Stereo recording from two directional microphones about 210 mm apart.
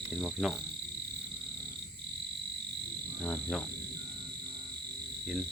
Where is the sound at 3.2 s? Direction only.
5° left (ahead or behind).